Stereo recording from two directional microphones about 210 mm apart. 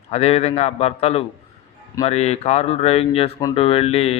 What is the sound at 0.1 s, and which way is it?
A man's voice, 30° left (ahead or behind).